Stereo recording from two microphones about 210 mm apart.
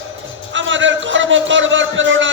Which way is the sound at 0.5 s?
65° right (ahead or behind).